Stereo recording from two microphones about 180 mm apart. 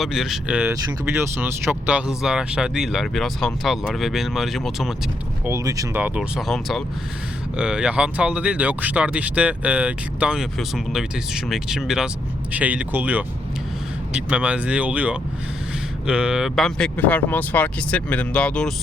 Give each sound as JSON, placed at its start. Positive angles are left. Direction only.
{"t": 0.0, "sound": "speech", "side_deg": 0}
{"t": 5.5, "sound": "speech", "side_deg": -15}